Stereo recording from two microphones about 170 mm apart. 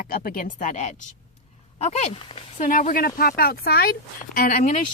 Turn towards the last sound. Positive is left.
turn(degrees=60)  # may be behind; listen again after turning